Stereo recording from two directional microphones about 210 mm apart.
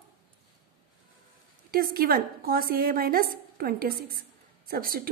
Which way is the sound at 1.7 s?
45° right (ahead or behind).